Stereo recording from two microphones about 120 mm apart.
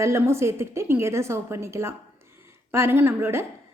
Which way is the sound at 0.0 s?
25° right (ahead or behind).